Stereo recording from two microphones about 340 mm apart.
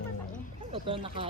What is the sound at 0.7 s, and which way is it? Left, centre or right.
Speech, centre.